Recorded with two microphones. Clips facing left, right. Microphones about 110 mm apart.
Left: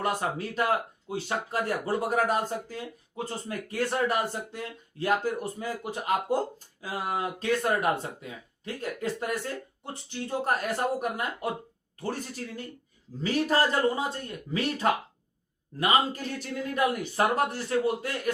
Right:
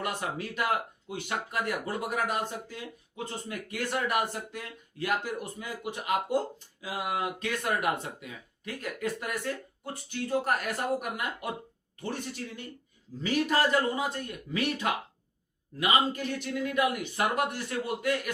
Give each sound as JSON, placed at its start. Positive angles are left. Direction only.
{"t": 0.0, "sound": "speech", "side_deg": 35}